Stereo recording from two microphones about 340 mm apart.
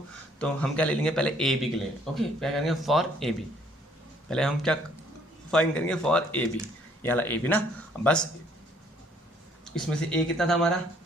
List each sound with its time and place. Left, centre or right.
0.3 s a man's voice: centre
9.6 s a man's voice: centre